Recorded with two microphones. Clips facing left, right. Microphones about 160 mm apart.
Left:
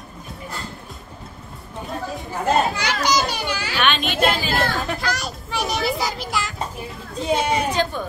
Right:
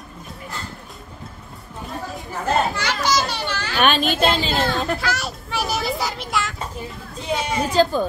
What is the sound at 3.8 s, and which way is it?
Speech, 40° right (ahead or behind).